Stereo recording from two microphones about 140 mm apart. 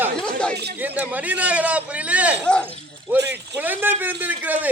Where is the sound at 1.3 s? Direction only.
10° right (ahead or behind).